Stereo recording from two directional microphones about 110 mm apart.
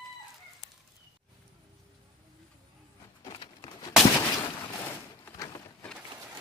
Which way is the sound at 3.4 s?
35° left (ahead or behind).